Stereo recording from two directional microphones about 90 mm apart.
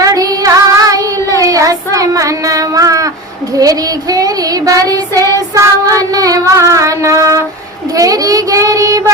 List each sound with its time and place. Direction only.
0.0 s music: 40° right (ahead or behind)
1.4 s child singing: 40° right (ahead or behind)